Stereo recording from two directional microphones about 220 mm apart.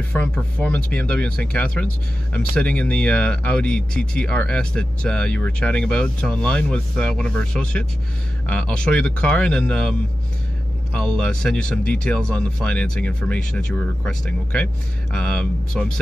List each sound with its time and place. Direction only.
0.1 s speech: 5° left (ahead or behind)